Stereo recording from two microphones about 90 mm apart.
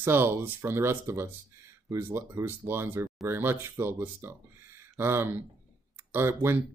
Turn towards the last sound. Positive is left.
turn(degrees=-25)  # may be behind; listen again after turning